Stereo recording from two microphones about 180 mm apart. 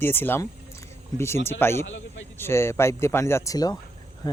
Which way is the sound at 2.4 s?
15° left (ahead or behind).